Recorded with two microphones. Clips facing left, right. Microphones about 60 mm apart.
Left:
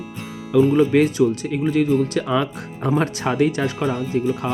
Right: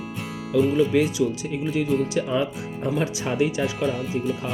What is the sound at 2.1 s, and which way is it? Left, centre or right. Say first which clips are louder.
Speech: left 3 dB; left.